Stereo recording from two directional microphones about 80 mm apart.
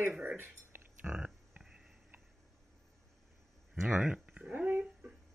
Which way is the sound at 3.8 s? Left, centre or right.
Centre.